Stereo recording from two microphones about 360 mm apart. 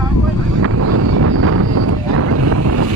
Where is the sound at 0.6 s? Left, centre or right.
Right.